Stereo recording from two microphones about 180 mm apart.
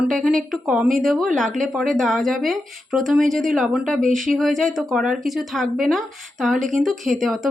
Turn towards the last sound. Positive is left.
turn(degrees=0)  # may be behind; listen again after turning